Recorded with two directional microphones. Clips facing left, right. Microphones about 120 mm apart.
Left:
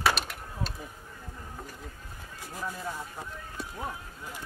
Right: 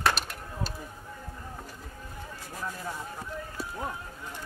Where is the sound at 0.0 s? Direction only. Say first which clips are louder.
Even; centre (ahead or behind).